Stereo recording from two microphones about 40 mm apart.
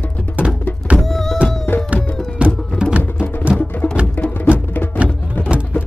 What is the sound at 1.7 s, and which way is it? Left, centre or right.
Music, left.